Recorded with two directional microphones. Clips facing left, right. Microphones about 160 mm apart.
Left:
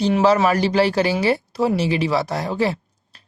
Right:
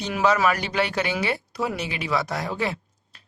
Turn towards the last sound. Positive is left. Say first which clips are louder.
# left 3 dB
turn(degrees=30)  # may be behind; listen again after turning